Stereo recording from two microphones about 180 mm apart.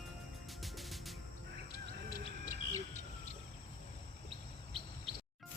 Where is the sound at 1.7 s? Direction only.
55° left (ahead or behind).